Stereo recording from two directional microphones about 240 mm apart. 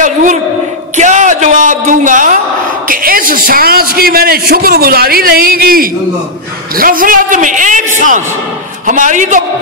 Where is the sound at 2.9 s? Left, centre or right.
Right.